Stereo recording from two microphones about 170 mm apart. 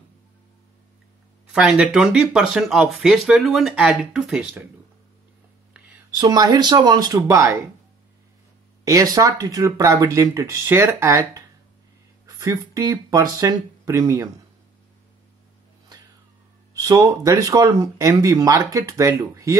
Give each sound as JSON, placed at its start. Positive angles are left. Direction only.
{"t": 1.5, "sound": "speech", "side_deg": -5}
{"t": 6.1, "sound": "speech", "side_deg": -20}
{"t": 8.8, "sound": "speech", "side_deg": -20}
{"t": 16.8, "sound": "speech", "side_deg": -20}